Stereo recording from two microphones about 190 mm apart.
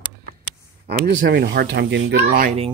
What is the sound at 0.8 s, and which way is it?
Speech, 60° right (ahead or behind).